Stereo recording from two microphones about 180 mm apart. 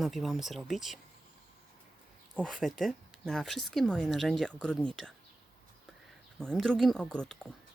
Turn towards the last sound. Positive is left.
turn(degrees=5)  # may be behind; listen again after turning